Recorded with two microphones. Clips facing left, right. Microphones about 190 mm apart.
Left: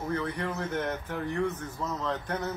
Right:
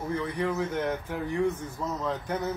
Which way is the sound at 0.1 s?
10° right (ahead or behind).